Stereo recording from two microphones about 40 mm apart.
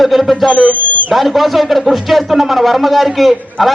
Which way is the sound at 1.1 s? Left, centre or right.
Centre.